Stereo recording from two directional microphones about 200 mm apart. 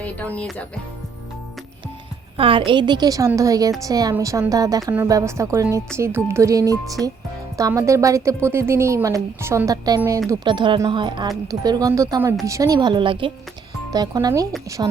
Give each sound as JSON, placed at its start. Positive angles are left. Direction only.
{"t": 0.0, "sound": "speech", "side_deg": 5}
{"t": 2.4, "sound": "a woman's voice", "side_deg": -25}